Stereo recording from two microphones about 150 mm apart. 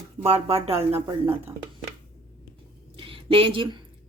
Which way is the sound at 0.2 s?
40° right (ahead or behind).